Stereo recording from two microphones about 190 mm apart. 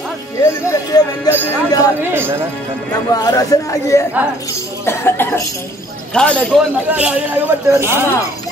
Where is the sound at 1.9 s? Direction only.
10° right (ahead or behind).